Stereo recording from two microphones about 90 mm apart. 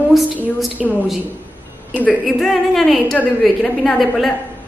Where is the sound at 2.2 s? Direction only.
Centre (ahead or behind).